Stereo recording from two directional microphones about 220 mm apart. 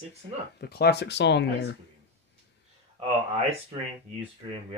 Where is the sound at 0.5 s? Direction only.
45° left (ahead or behind).